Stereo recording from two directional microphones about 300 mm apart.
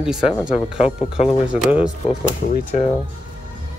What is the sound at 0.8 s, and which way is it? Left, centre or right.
Speech, centre.